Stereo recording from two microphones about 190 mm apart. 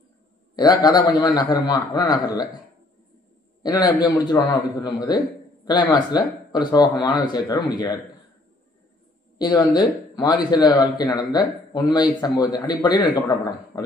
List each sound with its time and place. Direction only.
0.6 s speech: 20° left (ahead or behind)
3.6 s speech: 20° left (ahead or behind)
9.4 s speech: 20° left (ahead or behind)